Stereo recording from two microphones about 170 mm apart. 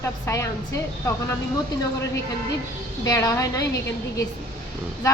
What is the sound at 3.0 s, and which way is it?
A woman's voice, 20° left (ahead or behind).